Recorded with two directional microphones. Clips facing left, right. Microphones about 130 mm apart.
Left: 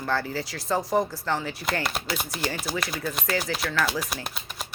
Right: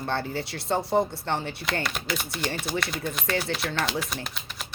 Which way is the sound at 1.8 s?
35° left (ahead or behind).